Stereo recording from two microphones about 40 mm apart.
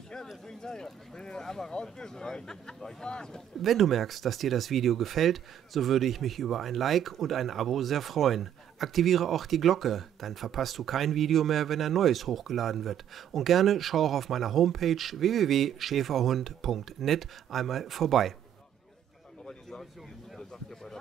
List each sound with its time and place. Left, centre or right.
0.5 s speech: centre
3.6 s speech: centre
20.3 s a sound: centre